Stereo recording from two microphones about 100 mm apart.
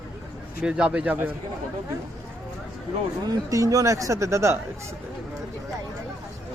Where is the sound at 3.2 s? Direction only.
40° right (ahead or behind).